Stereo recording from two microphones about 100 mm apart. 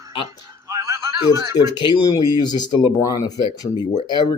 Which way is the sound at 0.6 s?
30° right (ahead or behind).